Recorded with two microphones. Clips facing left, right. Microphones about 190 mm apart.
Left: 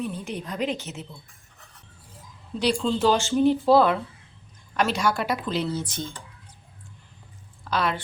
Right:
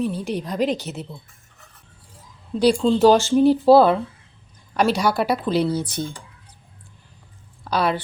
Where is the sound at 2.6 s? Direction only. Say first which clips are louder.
Right 7 dB; 40° right (ahead or behind).